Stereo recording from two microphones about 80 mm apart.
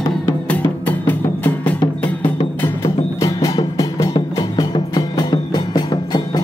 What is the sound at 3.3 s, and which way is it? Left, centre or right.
Music, left.